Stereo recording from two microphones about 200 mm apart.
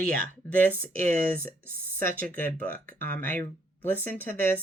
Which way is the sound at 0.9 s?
45° right (ahead or behind).